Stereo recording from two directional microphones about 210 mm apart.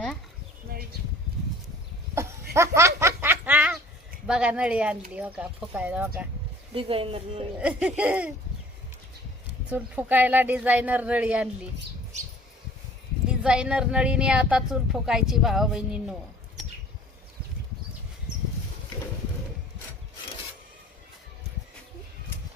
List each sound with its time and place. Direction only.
0.7 s bee: 45° right (ahead or behind)
2.1 s a sound: 15° right (ahead or behind)
4.3 s a woman's voice: 5° right (ahead or behind)
6.7 s speech: 25° right (ahead or behind)
7.6 s a woman's voice: 5° right (ahead or behind)
9.6 s a woman's voice: 5° right (ahead or behind)
13.4 s speech: 5° right (ahead or behind)